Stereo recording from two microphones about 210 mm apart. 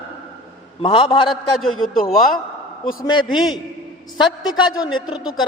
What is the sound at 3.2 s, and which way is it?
Speech, centre (ahead or behind).